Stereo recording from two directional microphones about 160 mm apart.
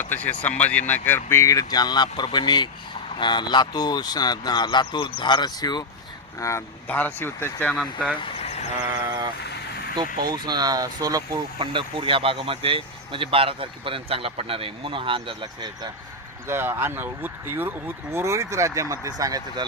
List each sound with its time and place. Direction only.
0.0 s speech: 10° left (ahead or behind); by 5.8 s 25° left (ahead or behind)
6.4 s speech: 15° left (ahead or behind)
8.2 s vehicle: 40° left (ahead or behind)
10.2 s speech: 25° right (ahead or behind)
16.5 s speech: 15° right (ahead or behind)